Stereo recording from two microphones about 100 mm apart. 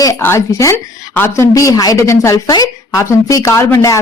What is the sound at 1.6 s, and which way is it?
A woman's voice, 35° left (ahead or behind).